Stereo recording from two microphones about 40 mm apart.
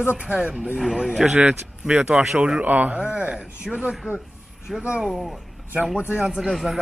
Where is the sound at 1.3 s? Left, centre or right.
Right.